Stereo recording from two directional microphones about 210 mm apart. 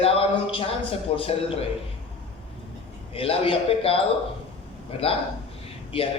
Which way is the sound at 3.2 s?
25° left (ahead or behind).